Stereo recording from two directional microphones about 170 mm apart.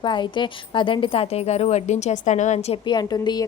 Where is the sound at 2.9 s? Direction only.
25° left (ahead or behind).